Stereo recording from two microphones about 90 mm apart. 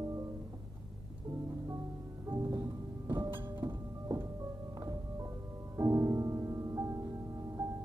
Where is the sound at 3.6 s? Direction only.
40° right (ahead or behind).